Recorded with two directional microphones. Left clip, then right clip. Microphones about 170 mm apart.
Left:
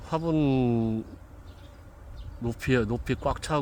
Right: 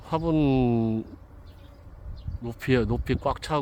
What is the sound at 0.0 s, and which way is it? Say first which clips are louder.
Speech: right 2 dB; 15° right (ahead or behind).